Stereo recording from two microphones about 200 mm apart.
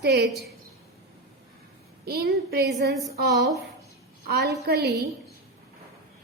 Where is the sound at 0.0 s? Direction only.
55° right (ahead or behind).